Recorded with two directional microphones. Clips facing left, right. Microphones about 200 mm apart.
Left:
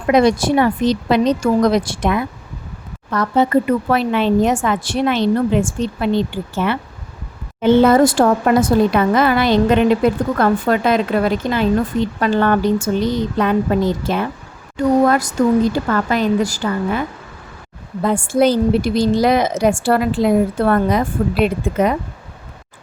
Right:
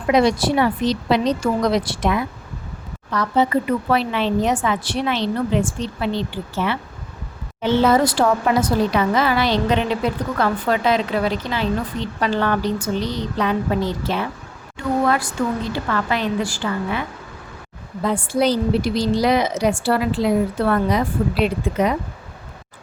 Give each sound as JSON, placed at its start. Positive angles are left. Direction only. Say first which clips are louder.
{"t": 0.1, "sound": "speech", "louder": "left 3 dB", "side_deg": 50}
{"t": 18.0, "sound": "speech", "louder": "left 4 dB", "side_deg": 50}